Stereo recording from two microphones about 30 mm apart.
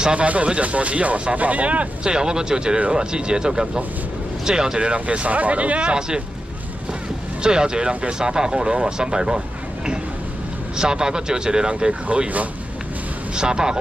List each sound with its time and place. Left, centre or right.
0.1 s speech: right
2.0 s speech: right
5.9 s speech: right
7.4 s speech: right
10.8 s speech: right
13.3 s speech: right